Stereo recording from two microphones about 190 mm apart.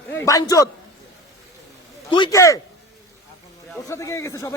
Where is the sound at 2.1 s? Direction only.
20° left (ahead or behind).